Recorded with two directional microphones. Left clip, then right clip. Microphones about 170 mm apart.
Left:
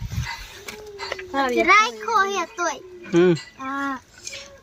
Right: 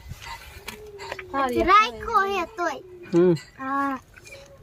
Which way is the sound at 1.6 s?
30° right (ahead or behind).